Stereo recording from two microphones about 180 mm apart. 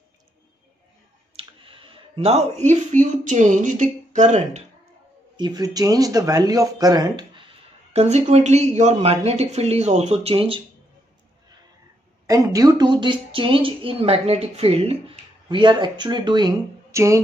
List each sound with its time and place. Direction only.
1.3 s speech: 30° right (ahead or behind)
5.4 s speech: 20° right (ahead or behind)
7.9 s speech: 35° right (ahead or behind)
12.3 s speech: 20° right (ahead or behind)